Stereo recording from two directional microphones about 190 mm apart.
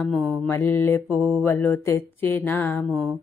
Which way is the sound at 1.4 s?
10° left (ahead or behind).